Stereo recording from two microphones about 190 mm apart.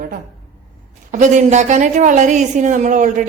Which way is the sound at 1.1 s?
40° right (ahead or behind).